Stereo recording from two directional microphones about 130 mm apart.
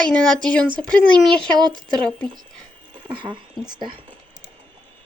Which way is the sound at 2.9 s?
40° right (ahead or behind).